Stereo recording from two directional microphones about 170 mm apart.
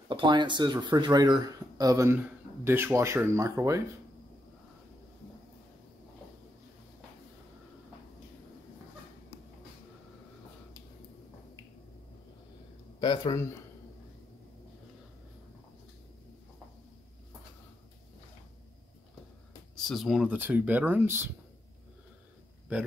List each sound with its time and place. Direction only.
0.1 s speech: 25° right (ahead or behind)
13.0 s speech: 25° left (ahead or behind)
19.7 s speech: centre (ahead or behind)